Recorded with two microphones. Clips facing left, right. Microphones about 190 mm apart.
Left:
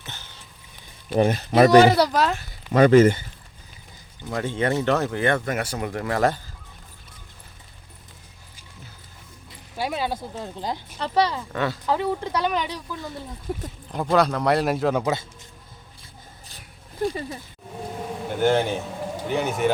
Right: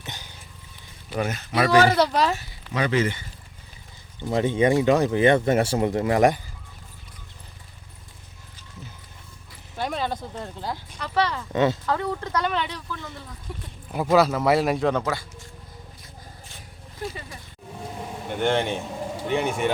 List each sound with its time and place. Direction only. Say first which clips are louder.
0.0 s vehicle: right 2 dB; 15° right (ahead or behind)
1.2 s speech: left 7 dB; 35° left (ahead or behind)
1.8 s a man's voice: left 2 dB; 5° left (ahead or behind)
2.7 s speech: left 9 dB; 45° left (ahead or behind)
4.2 s speech: right 4 dB; 20° right (ahead or behind)
9.7 s a sound: left 1 dB; 5° left (ahead or behind)
10.5 s speech: left 2 dB; 20° left (ahead or behind)
11.5 s speech: right 10 dB; 20° right (ahead or behind)
11.9 s speech: left 2 dB; 15° left (ahead or behind)
13.5 s speech: left 9 dB; 45° left (ahead or behind)
13.9 s a man's voice: right 1 dB; 5° right (ahead or behind)
15.0 s speech: left 3 dB; 20° left (ahead or behind)
18.3 s a man's voice: left 3 dB; centre (ahead or behind)